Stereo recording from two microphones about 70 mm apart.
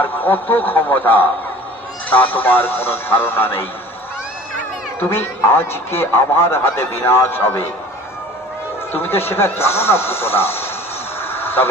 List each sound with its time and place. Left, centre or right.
0.0 s a man's voice: left
4.9 s a man's voice: left
8.9 s a man's voice: left
11.2 s vehicle: left